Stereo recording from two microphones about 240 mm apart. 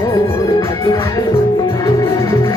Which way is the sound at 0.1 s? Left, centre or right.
Centre.